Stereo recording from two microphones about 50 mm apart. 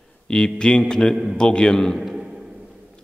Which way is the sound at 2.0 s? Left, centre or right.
Centre.